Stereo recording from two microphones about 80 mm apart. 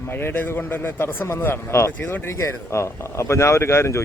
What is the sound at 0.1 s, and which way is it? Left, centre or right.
A man's voice, left.